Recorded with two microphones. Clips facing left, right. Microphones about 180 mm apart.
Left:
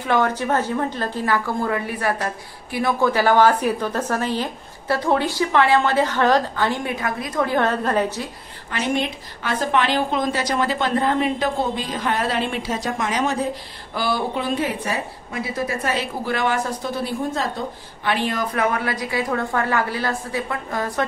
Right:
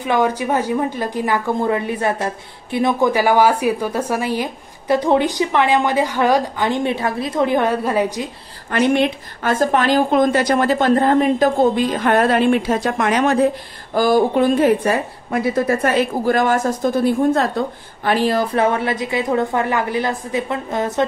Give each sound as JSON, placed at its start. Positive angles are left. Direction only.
{"t": 0.0, "sound": "a woman's voice", "side_deg": -15}
{"t": 8.6, "sound": "a woman's voice", "side_deg": -60}
{"t": 9.5, "sound": "a woman's voice", "side_deg": -45}
{"t": 13.9, "sound": "a woman's voice", "side_deg": -45}
{"t": 18.0, "sound": "a woman's voice", "side_deg": -40}